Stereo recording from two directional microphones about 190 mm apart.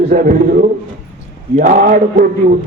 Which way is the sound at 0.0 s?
45° right (ahead or behind).